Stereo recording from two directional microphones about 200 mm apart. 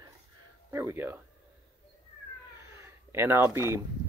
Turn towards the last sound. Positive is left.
turn(degrees=-15)  # may be behind; listen again after turning